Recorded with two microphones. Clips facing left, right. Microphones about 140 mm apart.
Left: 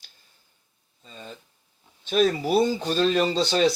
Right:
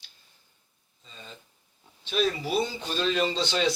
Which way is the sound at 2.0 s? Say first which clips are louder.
Left 6 dB; 45° left (ahead or behind).